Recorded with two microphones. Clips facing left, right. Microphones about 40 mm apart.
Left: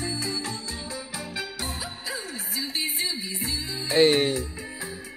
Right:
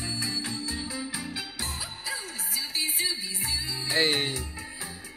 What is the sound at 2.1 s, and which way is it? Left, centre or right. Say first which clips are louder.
Music: even; left.